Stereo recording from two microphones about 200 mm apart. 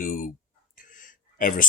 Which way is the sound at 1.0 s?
45° left (ahead or behind).